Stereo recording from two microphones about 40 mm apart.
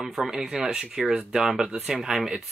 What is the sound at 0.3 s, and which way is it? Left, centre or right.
Speech, centre.